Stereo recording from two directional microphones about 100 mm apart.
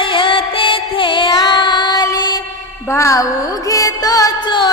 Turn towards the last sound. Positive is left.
turn(degrees=45)  # may be behind; listen again after turning